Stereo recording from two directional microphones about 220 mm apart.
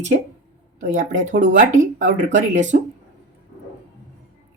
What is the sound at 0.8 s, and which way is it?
Speech, 35° right (ahead or behind).